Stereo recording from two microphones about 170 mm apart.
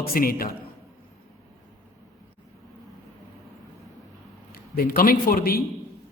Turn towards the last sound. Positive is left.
turn(degrees=60)  # may be behind; listen again after turning